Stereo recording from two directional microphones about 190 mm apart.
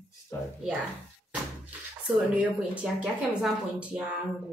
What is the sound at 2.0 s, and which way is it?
Speech, 5° right (ahead or behind).